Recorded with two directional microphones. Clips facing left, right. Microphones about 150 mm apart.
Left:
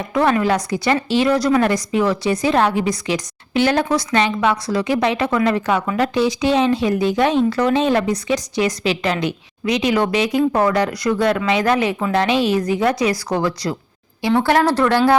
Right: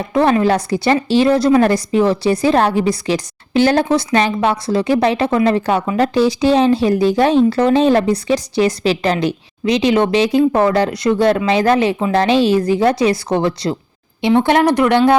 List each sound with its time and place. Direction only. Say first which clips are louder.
0.0 s a woman's voice: right 3 dB; 30° right (ahead or behind)